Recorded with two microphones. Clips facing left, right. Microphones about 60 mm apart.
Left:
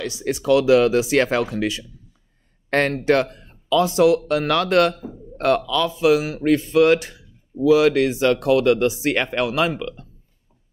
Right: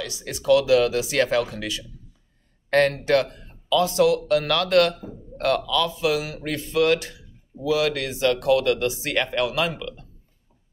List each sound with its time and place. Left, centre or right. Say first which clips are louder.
0.0 s speech: left 5 dB; left